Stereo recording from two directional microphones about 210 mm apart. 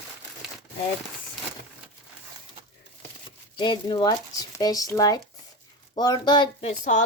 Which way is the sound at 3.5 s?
20° left (ahead or behind).